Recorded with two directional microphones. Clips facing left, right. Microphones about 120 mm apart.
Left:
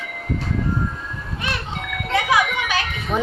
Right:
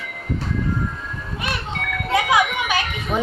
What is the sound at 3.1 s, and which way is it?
Speech, centre (ahead or behind).